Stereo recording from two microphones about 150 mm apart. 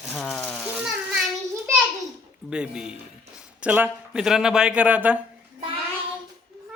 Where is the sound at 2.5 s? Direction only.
5° right (ahead or behind).